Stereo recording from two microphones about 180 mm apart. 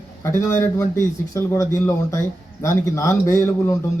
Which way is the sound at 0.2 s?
15° left (ahead or behind).